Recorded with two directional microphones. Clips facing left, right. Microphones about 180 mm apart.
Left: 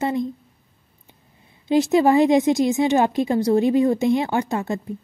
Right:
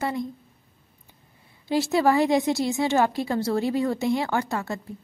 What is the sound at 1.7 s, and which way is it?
A woman's voice, 20° left (ahead or behind).